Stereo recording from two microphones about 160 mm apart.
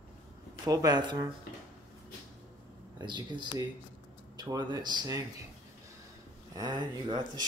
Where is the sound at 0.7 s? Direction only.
25° right (ahead or behind).